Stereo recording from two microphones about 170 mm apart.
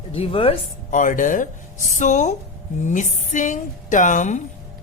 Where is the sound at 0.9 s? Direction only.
50° left (ahead or behind).